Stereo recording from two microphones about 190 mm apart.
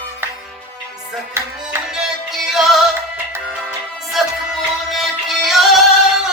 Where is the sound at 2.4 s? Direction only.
Centre (ahead or behind).